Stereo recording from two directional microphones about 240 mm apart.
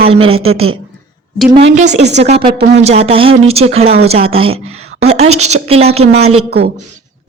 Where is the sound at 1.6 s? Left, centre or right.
Right.